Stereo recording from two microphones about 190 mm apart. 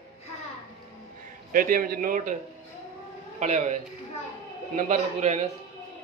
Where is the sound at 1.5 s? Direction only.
50° right (ahead or behind).